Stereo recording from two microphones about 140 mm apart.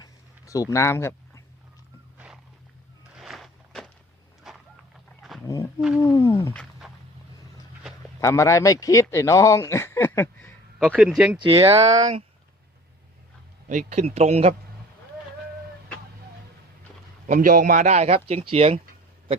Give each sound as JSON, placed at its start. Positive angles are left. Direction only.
{"t": 0.0, "sound": "a sound", "side_deg": 25}
{"t": 2.1, "sound": "walk", "side_deg": -5}
{"t": 3.2, "sound": "a sound", "side_deg": 0}
{"t": 4.4, "sound": "vehicle", "side_deg": 0}
{"t": 6.0, "sound": "speech", "side_deg": 20}
{"t": 6.8, "sound": "vehicle", "side_deg": -5}
{"t": 8.2, "sound": "speech", "side_deg": 20}
{"t": 10.8, "sound": "speech", "side_deg": -5}
{"t": 11.3, "sound": "speech", "side_deg": -40}
{"t": 13.7, "sound": "speech", "side_deg": -60}
{"t": 17.2, "sound": "speech", "side_deg": -70}